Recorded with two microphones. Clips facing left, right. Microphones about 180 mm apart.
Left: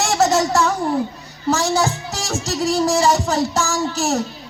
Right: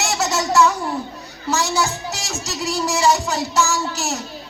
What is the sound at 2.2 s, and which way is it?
Speech, 50° left (ahead or behind).